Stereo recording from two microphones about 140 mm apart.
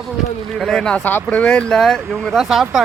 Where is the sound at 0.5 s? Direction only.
5° left (ahead or behind).